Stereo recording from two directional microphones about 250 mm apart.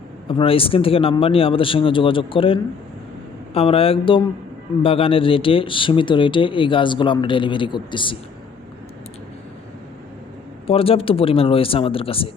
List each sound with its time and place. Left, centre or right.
0.3 s speech: left
10.7 s speech: left